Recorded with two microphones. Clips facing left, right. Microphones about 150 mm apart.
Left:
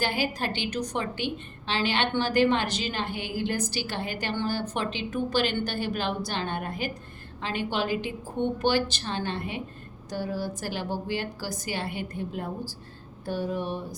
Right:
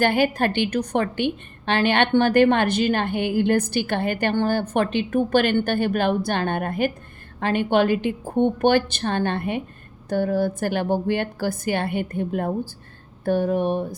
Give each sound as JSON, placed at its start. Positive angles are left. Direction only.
{"t": 0.0, "sound": "a woman's voice", "side_deg": -55}